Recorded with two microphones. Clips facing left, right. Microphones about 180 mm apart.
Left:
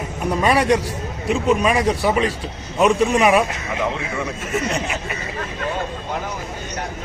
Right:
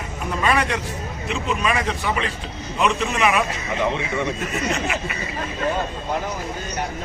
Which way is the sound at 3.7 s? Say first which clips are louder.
Right 1 dB; centre (ahead or behind).